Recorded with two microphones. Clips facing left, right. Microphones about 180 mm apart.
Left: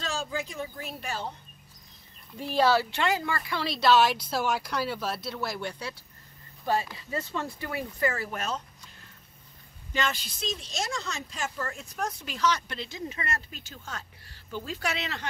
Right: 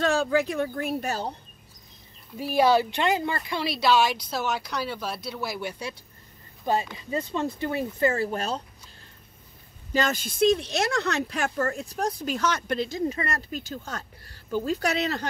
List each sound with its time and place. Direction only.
0.0 s speech: 60° right (ahead or behind); by 1.3 s 40° right (ahead or behind)
2.3 s speech: 10° right (ahead or behind); by 8.6 s 35° right (ahead or behind)
9.9 s speech: 45° right (ahead or behind)
11.8 s speech: 35° right (ahead or behind)